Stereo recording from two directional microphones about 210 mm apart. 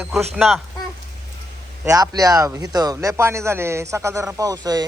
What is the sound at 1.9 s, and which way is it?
Speech, 15° right (ahead or behind).